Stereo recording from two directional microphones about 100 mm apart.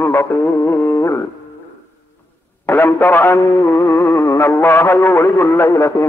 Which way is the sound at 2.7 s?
20° left (ahead or behind).